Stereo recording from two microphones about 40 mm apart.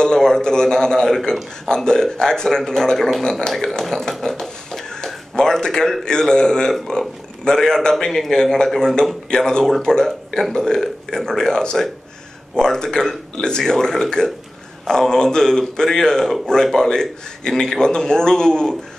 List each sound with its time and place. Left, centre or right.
0.0 s a man's voice: centre
3.5 s a sound: centre
6.0 s a man's voice: centre